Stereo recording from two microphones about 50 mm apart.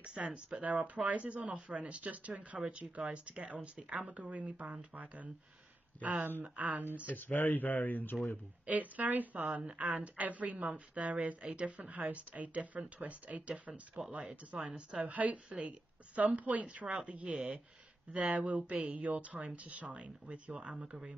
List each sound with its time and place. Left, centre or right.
0.0 s a sound: right
0.6 s a woman's voice: right
7.1 s speech: left
8.6 s a woman's voice: right
14.6 s a woman's voice: centre
15.0 s speech: right